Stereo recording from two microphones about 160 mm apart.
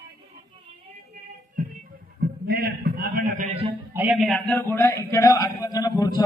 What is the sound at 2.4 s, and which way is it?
A man's voice, 75° right (ahead or behind).